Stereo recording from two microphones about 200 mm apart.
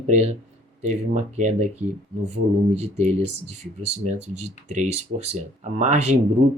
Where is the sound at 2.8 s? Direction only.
35° right (ahead or behind).